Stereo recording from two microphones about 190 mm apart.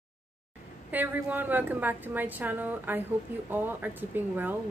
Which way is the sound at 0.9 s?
10° right (ahead or behind).